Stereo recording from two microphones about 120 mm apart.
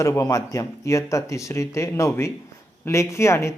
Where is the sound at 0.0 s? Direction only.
25° left (ahead or behind).